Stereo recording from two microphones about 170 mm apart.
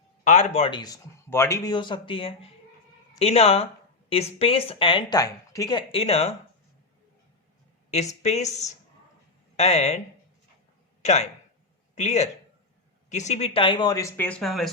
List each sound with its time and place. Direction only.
0.3 s speech: 45° left (ahead or behind)
0.7 s speech: 25° left (ahead or behind)
7.9 s speech: 40° left (ahead or behind)
11.0 s speech: 40° left (ahead or behind); by 14.7 s centre (ahead or behind)